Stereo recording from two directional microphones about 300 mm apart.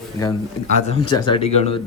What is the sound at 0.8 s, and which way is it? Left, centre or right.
Speech, centre.